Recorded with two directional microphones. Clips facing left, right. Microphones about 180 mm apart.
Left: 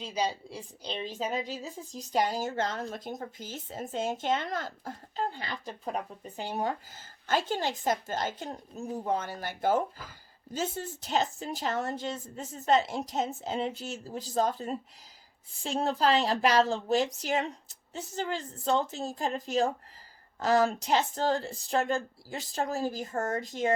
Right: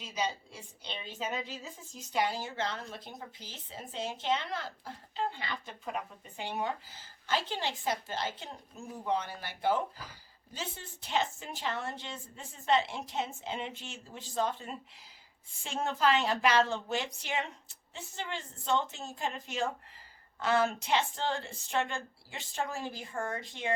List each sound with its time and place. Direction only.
0.0 s a woman's voice: 35° left (ahead or behind)